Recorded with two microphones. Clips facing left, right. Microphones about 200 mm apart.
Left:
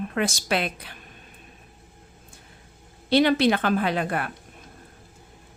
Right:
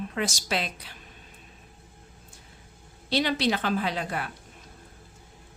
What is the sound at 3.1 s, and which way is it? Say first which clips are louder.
A woman's voice: left 6 dB; 55° left (ahead or behind).